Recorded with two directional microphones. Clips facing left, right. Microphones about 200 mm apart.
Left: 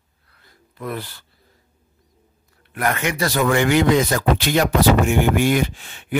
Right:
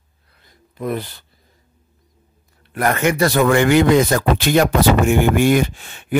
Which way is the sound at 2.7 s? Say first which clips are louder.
Right 5 dB; 40° right (ahead or behind).